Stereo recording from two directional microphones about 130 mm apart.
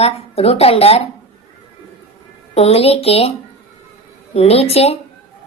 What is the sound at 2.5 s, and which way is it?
Speech, 50° left (ahead or behind).